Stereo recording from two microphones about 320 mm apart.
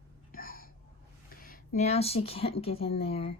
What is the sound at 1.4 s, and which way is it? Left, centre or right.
Speech, left.